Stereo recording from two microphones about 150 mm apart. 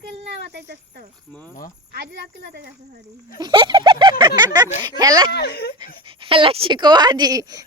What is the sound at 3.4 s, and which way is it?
Speech, 30° right (ahead or behind).